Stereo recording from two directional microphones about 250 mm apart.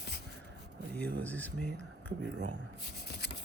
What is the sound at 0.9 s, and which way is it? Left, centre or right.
Speech, centre.